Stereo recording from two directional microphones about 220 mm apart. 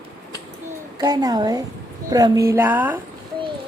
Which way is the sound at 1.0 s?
15° right (ahead or behind).